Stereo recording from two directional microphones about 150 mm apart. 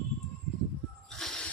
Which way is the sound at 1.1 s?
5° left (ahead or behind).